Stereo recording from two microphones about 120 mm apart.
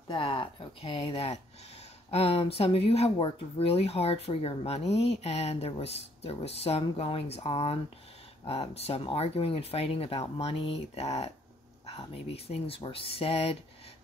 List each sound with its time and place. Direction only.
0.1 s speech: 45° left (ahead or behind)